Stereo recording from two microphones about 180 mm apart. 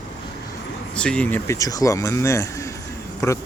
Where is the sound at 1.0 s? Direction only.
5° left (ahead or behind).